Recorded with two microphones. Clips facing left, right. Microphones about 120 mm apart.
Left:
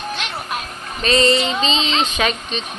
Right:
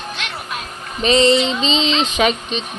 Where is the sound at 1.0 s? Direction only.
20° right (ahead or behind).